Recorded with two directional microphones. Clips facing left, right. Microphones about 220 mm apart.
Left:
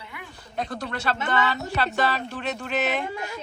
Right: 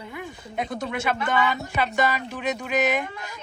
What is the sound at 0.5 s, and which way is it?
Speech, 15° right (ahead or behind).